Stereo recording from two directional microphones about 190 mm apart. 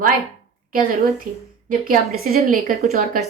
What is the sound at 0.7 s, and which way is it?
A woman's voice, 45° right (ahead or behind).